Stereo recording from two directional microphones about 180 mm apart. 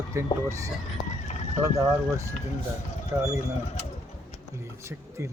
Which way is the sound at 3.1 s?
10° right (ahead or behind).